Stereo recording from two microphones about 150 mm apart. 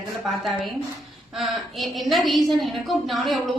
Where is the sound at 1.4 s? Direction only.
Centre (ahead or behind).